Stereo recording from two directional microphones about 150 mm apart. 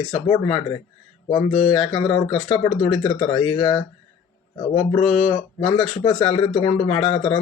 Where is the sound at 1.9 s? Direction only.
35° left (ahead or behind).